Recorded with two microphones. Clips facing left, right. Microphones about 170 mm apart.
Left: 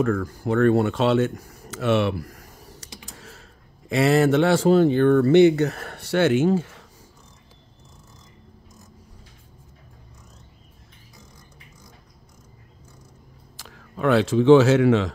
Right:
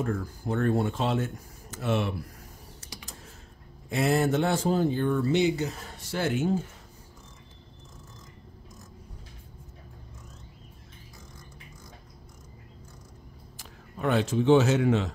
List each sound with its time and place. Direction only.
0.0 s speech: 90° left
3.2 s computer keyboard: 90° left
3.9 s speech: 90° left
13.6 s speech: 90° left